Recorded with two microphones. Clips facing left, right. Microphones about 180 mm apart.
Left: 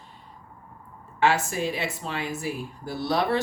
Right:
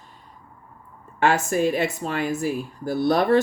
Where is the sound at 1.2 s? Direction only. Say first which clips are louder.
Right 3 dB; 50° right (ahead or behind).